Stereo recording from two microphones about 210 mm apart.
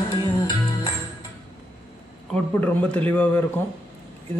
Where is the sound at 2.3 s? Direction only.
10° left (ahead or behind).